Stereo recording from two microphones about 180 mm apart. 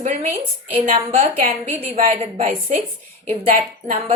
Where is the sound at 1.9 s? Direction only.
45° right (ahead or behind).